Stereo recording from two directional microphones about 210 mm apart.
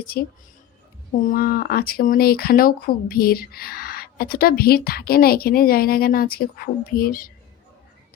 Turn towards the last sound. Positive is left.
turn(degrees=45)  # may be behind; listen again after turning